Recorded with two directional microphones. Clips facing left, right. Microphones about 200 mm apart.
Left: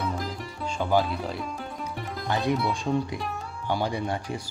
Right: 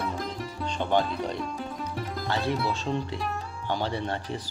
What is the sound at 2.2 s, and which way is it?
Speech, 15° left (ahead or behind).